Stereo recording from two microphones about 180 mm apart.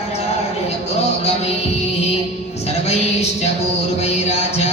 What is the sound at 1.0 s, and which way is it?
Music, 35° left (ahead or behind).